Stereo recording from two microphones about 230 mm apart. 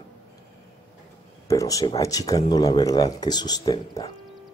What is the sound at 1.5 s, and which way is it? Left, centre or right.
Speech, centre.